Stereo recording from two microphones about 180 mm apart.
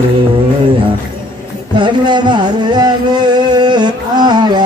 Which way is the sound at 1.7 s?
25° right (ahead or behind).